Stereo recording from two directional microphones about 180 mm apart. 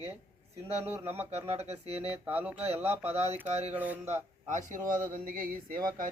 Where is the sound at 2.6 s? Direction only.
35° right (ahead or behind).